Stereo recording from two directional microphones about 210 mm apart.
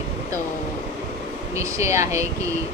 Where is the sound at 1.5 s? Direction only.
15° right (ahead or behind).